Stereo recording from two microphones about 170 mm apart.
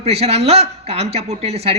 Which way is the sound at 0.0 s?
35° right (ahead or behind).